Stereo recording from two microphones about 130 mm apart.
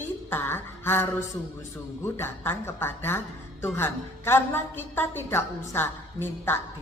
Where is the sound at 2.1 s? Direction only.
20° left (ahead or behind).